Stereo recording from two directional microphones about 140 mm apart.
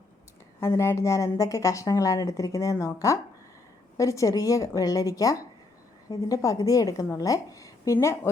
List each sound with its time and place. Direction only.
0.6 s a woman's voice: 20° left (ahead or behind)